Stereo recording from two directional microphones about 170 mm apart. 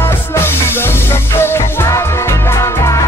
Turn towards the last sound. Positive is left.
turn(degrees=15)  # may be behind; listen again after turning